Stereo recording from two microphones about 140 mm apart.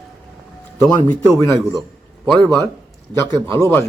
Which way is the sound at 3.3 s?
20° left (ahead or behind).